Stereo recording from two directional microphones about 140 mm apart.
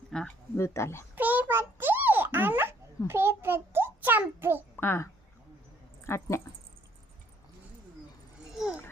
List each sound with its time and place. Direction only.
0.1 s a sound: 5° left (ahead or behind)
0.5 s speech: 20° left (ahead or behind)
1.1 s a sound: 10° right (ahead or behind)
3.1 s a child's voice: 15° right (ahead or behind)
4.8 s speech: 15° left (ahead or behind)
6.1 s speech: 20° left (ahead or behind)
8.6 s babbling: centre (ahead or behind)